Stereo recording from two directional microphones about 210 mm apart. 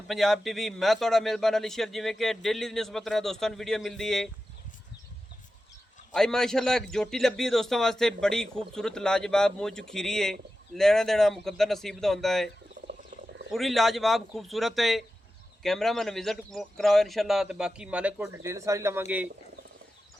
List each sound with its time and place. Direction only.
0.1 s a man's voice: centre (ahead or behind)
6.1 s a man's voice: 5° left (ahead or behind)
12.9 s frog: 50° right (ahead or behind)
13.5 s a man's voice: centre (ahead or behind)